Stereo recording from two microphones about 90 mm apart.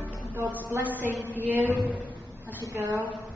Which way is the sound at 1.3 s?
20° right (ahead or behind).